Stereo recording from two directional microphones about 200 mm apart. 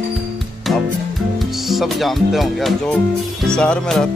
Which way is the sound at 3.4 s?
5° left (ahead or behind).